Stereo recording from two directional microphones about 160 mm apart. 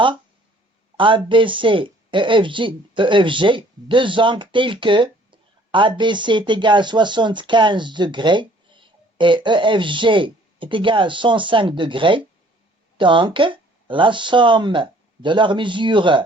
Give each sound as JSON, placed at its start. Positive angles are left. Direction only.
{"t": 0.9, "sound": "speech", "side_deg": -30}